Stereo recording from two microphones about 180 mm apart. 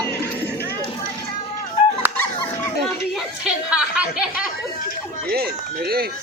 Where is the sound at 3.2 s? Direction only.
5° right (ahead or behind).